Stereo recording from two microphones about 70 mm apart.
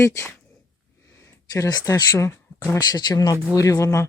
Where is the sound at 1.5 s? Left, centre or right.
Left.